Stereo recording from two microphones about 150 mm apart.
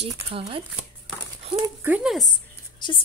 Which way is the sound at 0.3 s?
35° right (ahead or behind).